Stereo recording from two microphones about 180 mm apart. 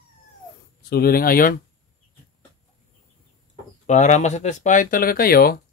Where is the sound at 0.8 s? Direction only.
60° left (ahead or behind).